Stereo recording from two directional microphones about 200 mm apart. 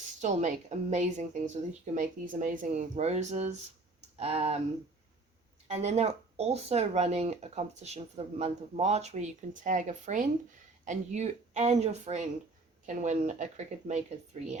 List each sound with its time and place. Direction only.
0.2 s speech: 35° right (ahead or behind)
5.6 s speech: 35° right (ahead or behind)